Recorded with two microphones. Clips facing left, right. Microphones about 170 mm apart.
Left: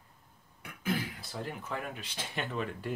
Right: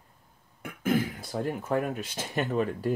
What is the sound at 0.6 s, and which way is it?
Speech, 50° right (ahead or behind).